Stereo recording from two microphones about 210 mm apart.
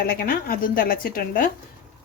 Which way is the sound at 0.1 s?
45° left (ahead or behind).